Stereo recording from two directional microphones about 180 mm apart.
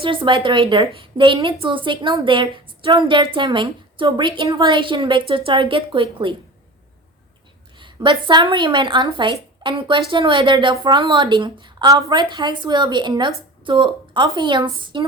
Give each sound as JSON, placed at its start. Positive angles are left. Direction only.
{"t": 0.0, "sound": "a woman's voice", "side_deg": -30}
{"t": 7.8, "sound": "a woman's voice", "side_deg": -25}